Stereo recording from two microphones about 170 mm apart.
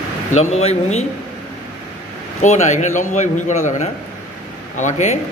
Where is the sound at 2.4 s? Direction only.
40° left (ahead or behind).